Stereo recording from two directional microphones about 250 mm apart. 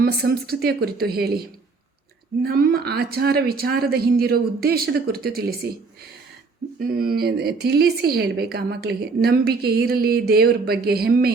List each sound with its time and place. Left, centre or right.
0.0 s a woman's voice: right
6.7 s a woman's voice: right